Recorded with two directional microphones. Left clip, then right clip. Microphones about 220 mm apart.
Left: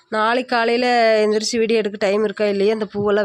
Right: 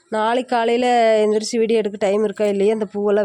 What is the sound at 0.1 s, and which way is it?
Speech, 10° right (ahead or behind).